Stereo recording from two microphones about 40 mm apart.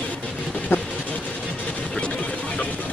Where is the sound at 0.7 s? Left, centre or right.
Left.